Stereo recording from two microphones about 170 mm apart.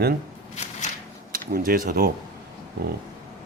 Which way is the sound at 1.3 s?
60° right (ahead or behind).